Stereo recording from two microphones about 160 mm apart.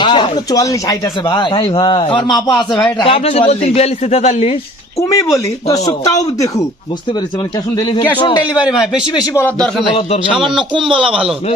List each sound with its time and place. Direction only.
0.0 s a man's voice: 30° left (ahead or behind)
4.9 s speech: 20° left (ahead or behind)
7.8 s speech: 25° left (ahead or behind)
8.5 s speech: 5° right (ahead or behind)
10.8 s speech: 30° right (ahead or behind)